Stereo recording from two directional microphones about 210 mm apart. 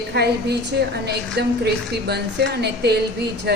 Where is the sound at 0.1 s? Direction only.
50° right (ahead or behind).